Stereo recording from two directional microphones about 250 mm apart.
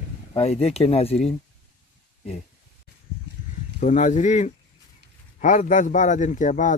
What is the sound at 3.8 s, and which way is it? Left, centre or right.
Speech, left.